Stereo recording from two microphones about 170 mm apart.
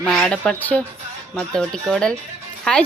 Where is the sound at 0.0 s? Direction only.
5° left (ahead or behind).